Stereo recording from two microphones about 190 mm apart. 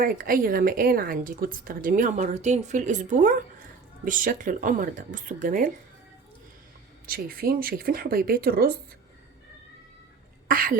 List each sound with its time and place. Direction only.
0.0 s a woman's voice: 45° right (ahead or behind)
7.1 s a woman's voice: 50° right (ahead or behind)
10.5 s a woman's voice: 50° right (ahead or behind)